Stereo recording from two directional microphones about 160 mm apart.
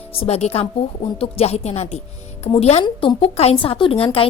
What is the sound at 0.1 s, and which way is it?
A woman's voice, 40° left (ahead or behind).